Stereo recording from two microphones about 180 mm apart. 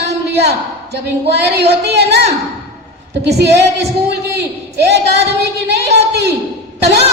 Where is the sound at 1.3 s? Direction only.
70° right (ahead or behind).